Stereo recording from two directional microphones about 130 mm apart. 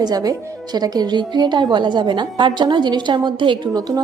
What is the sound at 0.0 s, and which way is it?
A woman's voice, 30° right (ahead or behind).